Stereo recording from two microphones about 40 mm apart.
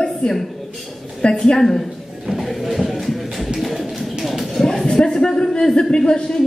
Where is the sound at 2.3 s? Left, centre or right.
Centre.